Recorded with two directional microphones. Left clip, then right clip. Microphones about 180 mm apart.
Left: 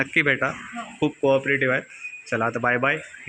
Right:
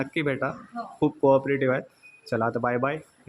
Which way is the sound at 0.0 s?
5° right (ahead or behind).